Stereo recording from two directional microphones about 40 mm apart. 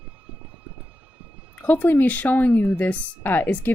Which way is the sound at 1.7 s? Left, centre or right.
Left.